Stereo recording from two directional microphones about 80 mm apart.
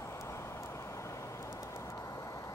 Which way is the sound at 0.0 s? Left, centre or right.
Left.